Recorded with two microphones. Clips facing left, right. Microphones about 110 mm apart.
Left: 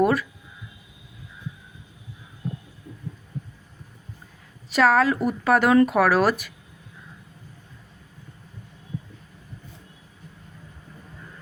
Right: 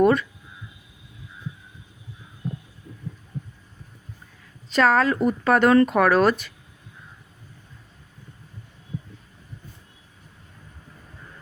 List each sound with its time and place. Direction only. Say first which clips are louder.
0.0 s speech: right 2 dB; 5° left (ahead or behind)
4.7 s speech: even; 5° left (ahead or behind)